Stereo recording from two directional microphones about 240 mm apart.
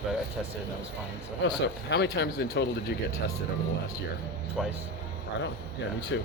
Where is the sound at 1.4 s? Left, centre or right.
Left.